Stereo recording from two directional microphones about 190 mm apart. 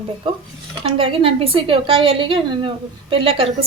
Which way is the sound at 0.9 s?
30° right (ahead or behind).